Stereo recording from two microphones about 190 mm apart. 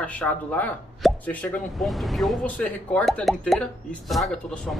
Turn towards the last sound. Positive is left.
turn(degrees=5)  # may be behind; listen again after turning